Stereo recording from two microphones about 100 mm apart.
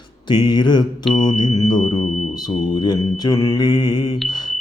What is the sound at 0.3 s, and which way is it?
Mantra, 50° left (ahead or behind).